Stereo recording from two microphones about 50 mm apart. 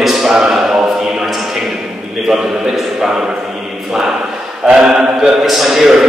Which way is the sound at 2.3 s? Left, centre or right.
Centre.